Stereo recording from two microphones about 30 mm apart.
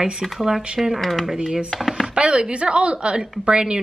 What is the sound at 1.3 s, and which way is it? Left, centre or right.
A woman's voice, right.